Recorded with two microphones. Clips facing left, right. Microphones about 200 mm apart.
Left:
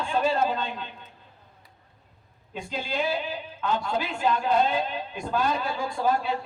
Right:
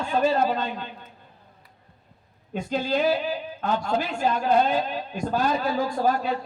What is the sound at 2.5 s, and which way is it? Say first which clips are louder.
A man's voice: right 6 dB; 45° right (ahead or behind).